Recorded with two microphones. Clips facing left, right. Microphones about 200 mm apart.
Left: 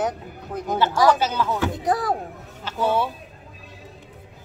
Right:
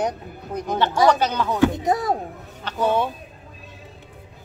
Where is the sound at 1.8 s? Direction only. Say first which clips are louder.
Right 1 dB; 20° right (ahead or behind).